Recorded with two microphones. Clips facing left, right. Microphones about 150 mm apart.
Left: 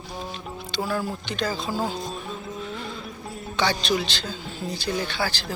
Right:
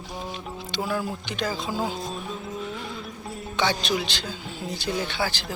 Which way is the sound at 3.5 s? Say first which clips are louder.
Left 1 dB; 20° right (ahead or behind).